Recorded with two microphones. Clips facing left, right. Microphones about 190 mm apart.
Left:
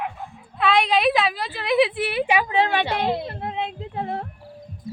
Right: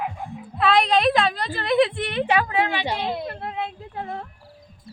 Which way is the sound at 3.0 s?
25° left (ahead or behind).